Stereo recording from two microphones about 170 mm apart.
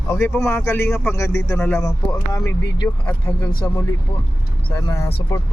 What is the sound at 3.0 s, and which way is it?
Speech, 10° left (ahead or behind).